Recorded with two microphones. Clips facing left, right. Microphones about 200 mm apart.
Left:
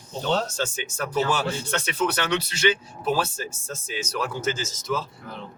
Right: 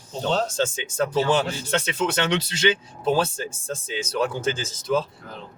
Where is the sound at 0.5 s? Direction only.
25° right (ahead or behind).